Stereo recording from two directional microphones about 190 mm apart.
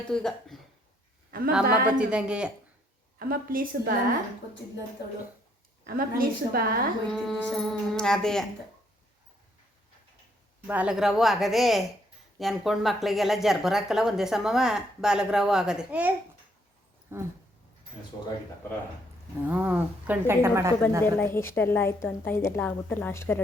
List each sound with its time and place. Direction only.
0.1 s speech: 5° left (ahead or behind)
1.6 s a woman's voice: 50° right (ahead or behind)
2.0 s speech: 5° right (ahead or behind)
3.2 s a woman's voice: 50° right (ahead or behind)
5.8 s a woman's voice: 50° right (ahead or behind)
7.1 s speech: 5° left (ahead or behind)
10.7 s a woman's voice: 5° right (ahead or behind)
19.5 s a woman's voice: 10° right (ahead or behind)
21.0 s a woman's voice: 10° left (ahead or behind)